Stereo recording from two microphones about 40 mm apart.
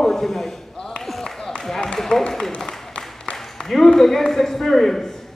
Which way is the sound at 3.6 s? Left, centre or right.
Centre.